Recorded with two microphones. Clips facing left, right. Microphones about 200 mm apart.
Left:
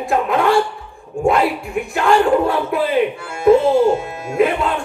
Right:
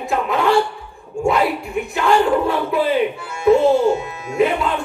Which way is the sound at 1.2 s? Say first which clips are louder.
Left 2 dB; 50° left (ahead or behind).